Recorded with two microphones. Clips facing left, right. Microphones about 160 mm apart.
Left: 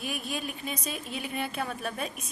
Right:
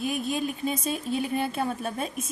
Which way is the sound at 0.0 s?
20° right (ahead or behind).